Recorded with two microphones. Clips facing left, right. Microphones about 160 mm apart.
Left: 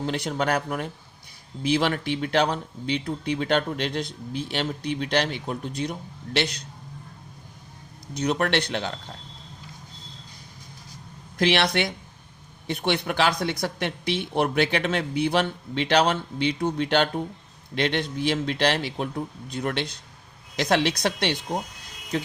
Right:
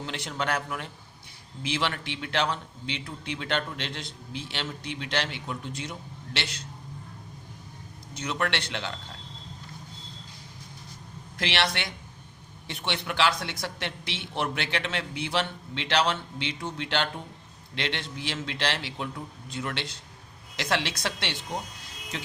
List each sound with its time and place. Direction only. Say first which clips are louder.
0.3 s speech: left 3 dB; 45° left (ahead or behind)
8.1 s speech: left 7 dB; 40° left (ahead or behind)
11.3 s speech: left 7 dB; 45° left (ahead or behind)